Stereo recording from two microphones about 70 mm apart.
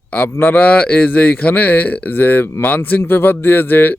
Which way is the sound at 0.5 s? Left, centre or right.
Left.